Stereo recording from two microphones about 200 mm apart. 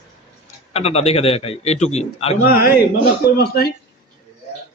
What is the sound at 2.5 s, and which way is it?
Speech, 50° left (ahead or behind).